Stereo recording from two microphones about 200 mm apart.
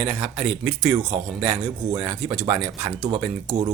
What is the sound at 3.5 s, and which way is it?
Speech, 30° right (ahead or behind).